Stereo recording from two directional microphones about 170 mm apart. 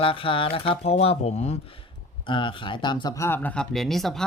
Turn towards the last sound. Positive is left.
turn(degrees=0)  # may be behind; listen again after turning